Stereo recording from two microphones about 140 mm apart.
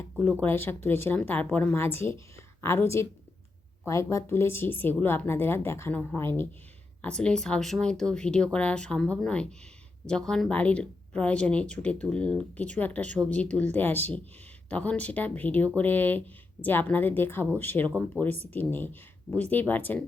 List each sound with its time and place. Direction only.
0.0 s speech: 15° left (ahead or behind)
3.8 s speech: 20° left (ahead or behind)